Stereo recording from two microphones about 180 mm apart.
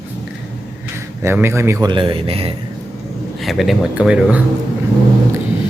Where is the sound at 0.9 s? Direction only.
15° right (ahead or behind).